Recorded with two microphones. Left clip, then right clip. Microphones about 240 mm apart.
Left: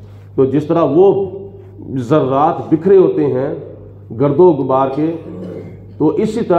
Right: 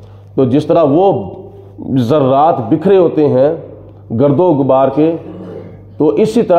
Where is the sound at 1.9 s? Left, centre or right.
Right.